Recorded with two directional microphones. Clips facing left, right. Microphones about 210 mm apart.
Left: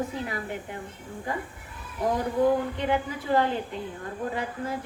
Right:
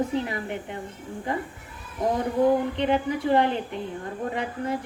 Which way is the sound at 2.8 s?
20° right (ahead or behind).